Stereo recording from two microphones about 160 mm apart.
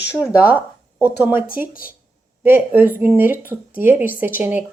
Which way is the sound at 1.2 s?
10° right (ahead or behind).